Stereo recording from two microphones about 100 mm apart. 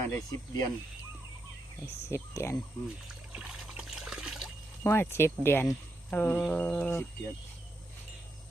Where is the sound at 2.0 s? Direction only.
30° left (ahead or behind).